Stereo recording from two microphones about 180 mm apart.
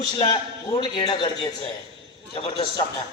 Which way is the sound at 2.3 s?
30° left (ahead or behind).